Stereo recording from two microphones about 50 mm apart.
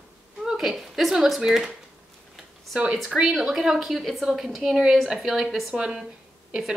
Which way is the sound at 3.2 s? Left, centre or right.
Centre.